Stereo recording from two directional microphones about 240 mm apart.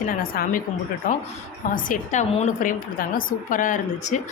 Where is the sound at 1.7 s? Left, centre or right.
Left.